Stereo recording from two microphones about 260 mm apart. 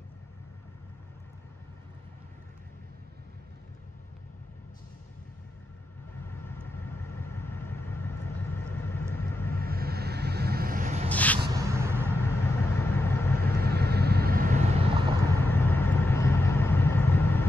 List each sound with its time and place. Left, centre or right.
6.3 s vehicle: centre
9.7 s vehicle: right
11.1 s a sound: centre
11.5 s a sound: centre
12.3 s vehicle: centre
13.6 s vehicle: right
15.4 s vehicle: centre